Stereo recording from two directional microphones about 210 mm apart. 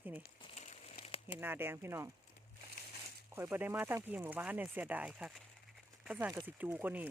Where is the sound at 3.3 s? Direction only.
10° right (ahead or behind).